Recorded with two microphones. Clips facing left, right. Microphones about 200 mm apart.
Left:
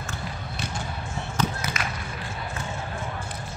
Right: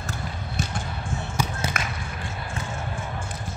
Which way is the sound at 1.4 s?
10° right (ahead or behind).